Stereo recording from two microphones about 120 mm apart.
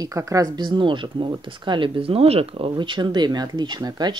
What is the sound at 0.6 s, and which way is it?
Speech, 40° right (ahead or behind).